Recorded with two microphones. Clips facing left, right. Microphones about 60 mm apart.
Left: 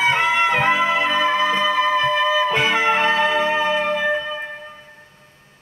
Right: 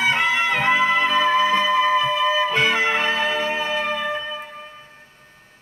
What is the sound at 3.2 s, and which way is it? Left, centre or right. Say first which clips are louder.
Music: left 4 dB; centre.